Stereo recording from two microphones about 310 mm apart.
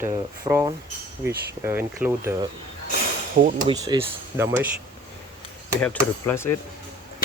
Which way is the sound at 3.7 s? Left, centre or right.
Centre.